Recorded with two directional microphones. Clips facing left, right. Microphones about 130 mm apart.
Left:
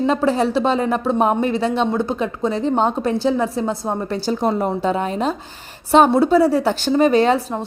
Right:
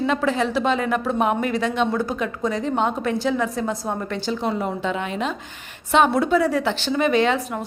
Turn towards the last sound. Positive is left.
turn(degrees=30)  # may be behind; listen again after turning